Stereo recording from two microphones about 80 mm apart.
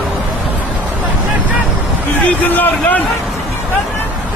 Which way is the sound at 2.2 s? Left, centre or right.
Left.